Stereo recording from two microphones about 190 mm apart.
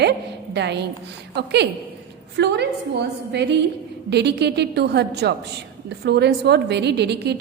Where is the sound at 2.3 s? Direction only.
60° right (ahead or behind).